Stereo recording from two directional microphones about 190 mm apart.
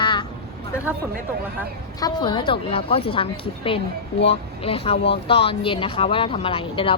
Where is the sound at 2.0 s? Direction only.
20° left (ahead or behind).